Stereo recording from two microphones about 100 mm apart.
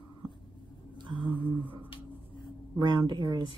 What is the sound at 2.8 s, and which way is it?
Speech, 45° right (ahead or behind).